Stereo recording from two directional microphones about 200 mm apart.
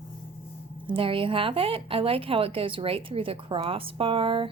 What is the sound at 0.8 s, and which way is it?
A woman's voice, 25° right (ahead or behind).